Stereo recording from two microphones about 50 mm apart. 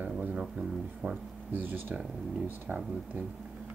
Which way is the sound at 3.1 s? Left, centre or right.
Right.